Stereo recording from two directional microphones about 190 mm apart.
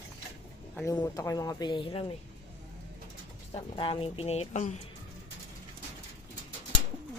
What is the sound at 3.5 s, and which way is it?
Speech, 25° left (ahead or behind).